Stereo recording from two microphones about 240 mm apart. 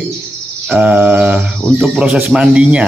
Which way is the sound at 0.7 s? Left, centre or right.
Centre.